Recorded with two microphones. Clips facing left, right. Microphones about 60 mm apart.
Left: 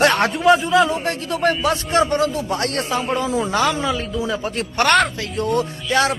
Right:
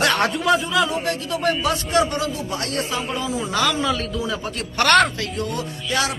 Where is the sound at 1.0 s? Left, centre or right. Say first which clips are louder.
Left 2 dB; left.